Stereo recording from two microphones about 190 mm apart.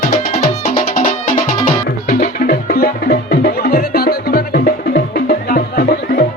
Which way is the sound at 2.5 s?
50° left (ahead or behind).